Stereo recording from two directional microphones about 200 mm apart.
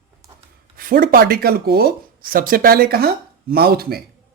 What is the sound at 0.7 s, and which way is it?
Speech, 45° right (ahead or behind).